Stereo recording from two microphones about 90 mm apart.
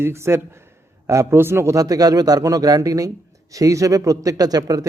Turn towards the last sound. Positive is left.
turn(degrees=-45)  # may be behind; listen again after turning